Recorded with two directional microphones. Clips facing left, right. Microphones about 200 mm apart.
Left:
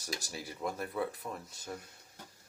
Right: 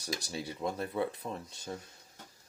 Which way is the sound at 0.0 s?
25° right (ahead or behind).